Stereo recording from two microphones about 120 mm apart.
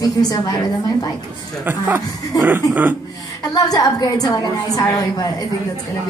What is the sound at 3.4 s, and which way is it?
A woman's voice, 35° left (ahead or behind).